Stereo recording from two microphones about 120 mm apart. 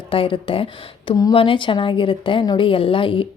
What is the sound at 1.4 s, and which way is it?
A woman's voice, 45° left (ahead or behind).